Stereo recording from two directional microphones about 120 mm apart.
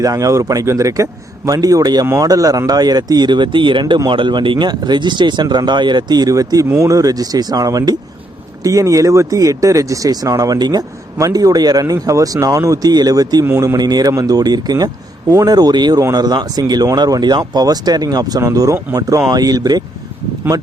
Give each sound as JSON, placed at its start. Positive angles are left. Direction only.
{"t": 0.0, "sound": "speech", "side_deg": -30}